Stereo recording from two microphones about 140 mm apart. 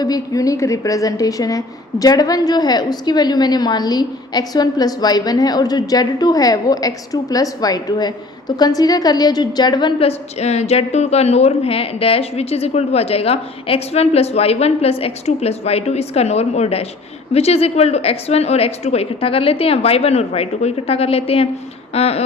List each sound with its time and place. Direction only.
0.0 s a woman's voice: 25° left (ahead or behind)
10.1 s a woman's voice: 50° left (ahead or behind)